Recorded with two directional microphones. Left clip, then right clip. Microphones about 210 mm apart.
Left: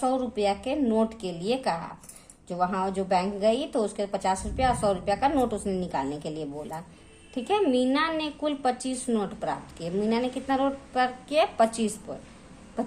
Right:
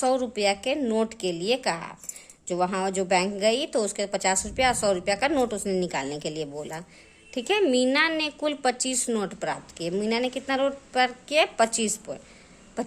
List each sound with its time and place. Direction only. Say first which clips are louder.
0.0 s a woman's voice: right 2 dB; 35° right (ahead or behind)